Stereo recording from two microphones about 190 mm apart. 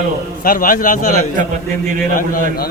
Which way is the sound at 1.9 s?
45° right (ahead or behind).